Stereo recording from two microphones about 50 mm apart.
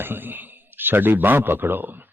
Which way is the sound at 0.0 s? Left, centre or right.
Right.